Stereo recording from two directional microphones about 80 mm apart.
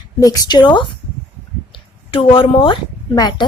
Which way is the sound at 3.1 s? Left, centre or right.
Left.